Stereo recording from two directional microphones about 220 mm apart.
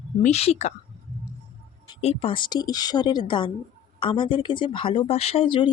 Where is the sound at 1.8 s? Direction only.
25° left (ahead or behind).